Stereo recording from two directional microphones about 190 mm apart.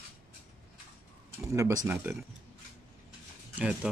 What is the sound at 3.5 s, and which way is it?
Speech, 5° right (ahead or behind).